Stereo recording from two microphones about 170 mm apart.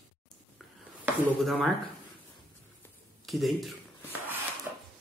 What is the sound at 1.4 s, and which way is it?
Speech, centre (ahead or behind).